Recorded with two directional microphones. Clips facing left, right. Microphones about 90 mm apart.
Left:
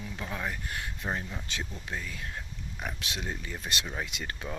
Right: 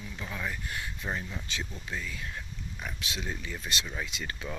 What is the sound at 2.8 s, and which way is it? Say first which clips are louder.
Speech: left 2 dB; 55° left (ahead or behind).